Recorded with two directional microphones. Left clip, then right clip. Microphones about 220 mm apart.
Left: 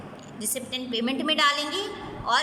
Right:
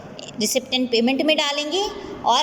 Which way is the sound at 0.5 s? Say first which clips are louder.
Right 9 dB; 20° right (ahead or behind).